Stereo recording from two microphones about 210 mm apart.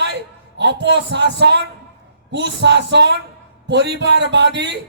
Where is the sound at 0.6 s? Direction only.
55° right (ahead or behind).